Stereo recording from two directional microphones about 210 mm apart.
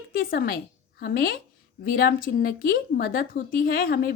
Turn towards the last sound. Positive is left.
turn(degrees=45)  # may be behind; listen again after turning